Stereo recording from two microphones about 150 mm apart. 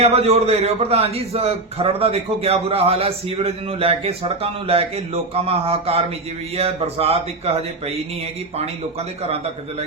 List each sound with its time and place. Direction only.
0.0 s a man's voice: 45° right (ahead or behind)